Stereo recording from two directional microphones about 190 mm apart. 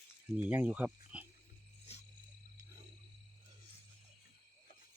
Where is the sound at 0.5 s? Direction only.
5° right (ahead or behind).